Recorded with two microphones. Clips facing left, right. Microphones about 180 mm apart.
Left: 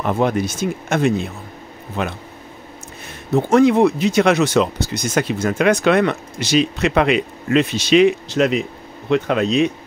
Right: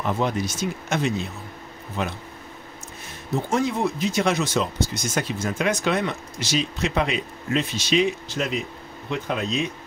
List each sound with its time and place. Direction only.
0.0 s speech: 60° left (ahead or behind)
2.0 s speech: 65° left (ahead or behind)
3.3 s speech: 70° left (ahead or behind)